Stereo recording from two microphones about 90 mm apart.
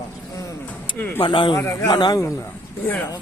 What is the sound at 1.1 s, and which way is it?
Speech, 70° left (ahead or behind).